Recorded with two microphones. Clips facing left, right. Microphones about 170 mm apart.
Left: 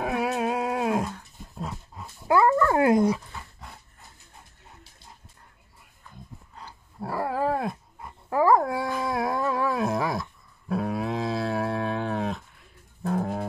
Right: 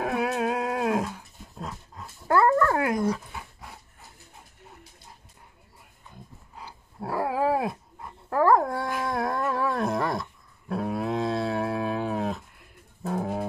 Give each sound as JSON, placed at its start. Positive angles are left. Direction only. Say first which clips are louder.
{"t": 0.0, "sound": "dog", "louder": "even", "side_deg": 0}
{"t": 2.7, "sound": "dog", "louder": "left 5 dB", "side_deg": 25}
{"t": 3.3, "sound": "dog", "louder": "right 1 dB", "side_deg": -10}
{"t": 6.5, "sound": "dog", "louder": "right 5 dB", "side_deg": -5}